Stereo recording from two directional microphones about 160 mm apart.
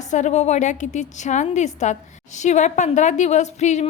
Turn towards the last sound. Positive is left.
turn(degrees=45)  # may be behind; listen again after turning